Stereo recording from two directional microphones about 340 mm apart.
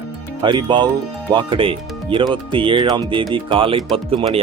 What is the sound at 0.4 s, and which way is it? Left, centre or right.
Speech, centre.